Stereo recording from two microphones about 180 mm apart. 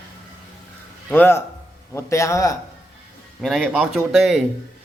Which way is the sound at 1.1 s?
10° left (ahead or behind).